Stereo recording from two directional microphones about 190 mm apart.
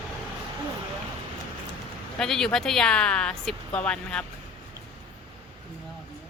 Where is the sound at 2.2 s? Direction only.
5° left (ahead or behind).